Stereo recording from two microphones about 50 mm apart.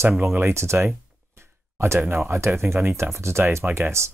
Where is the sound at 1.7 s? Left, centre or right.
Right.